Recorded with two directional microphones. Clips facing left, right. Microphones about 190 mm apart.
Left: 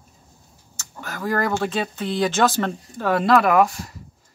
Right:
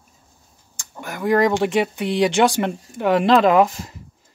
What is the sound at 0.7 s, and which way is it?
Speech, 15° right (ahead or behind).